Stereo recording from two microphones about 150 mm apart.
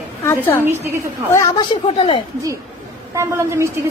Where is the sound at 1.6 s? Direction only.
35° left (ahead or behind).